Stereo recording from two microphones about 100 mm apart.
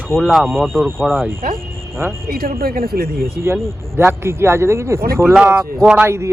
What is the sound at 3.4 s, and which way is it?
Speech, 25° right (ahead or behind).